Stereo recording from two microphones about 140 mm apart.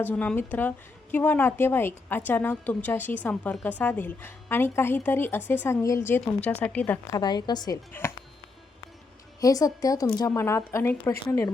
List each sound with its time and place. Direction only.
0.0 s a woman's voice: 10° left (ahead or behind)
7.1 s a woman's voice: 30° left (ahead or behind)
9.4 s a woman's voice: 25° left (ahead or behind)